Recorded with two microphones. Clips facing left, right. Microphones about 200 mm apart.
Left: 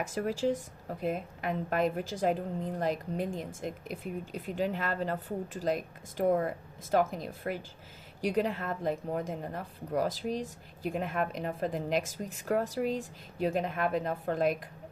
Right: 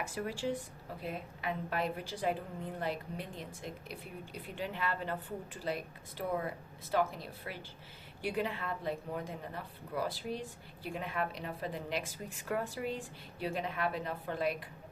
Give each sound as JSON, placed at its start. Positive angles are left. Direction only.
{"t": 0.0, "sound": "a woman's voice", "side_deg": 40}